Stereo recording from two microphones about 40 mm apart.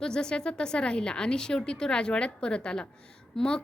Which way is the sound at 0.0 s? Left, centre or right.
Centre.